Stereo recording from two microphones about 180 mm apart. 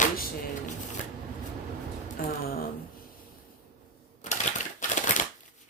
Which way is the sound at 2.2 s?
55° left (ahead or behind).